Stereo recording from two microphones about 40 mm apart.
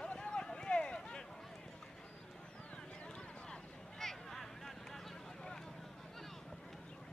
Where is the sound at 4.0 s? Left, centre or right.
Centre.